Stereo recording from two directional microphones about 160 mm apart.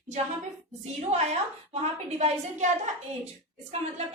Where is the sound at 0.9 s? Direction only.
45° right (ahead or behind).